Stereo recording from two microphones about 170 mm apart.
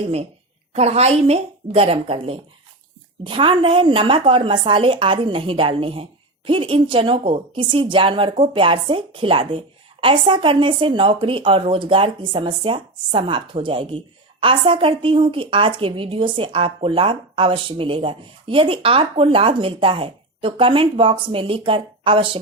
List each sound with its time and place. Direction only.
0.7 s a woman's voice: 40° right (ahead or behind)